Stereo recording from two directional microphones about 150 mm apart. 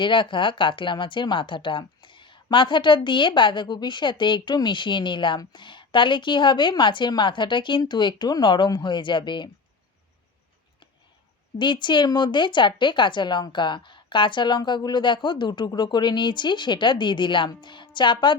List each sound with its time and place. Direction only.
0.0 s speech: 35° left (ahead or behind)
11.5 s speech: 30° left (ahead or behind)